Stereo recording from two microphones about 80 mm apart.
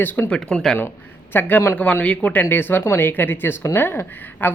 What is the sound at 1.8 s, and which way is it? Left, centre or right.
Speech, centre.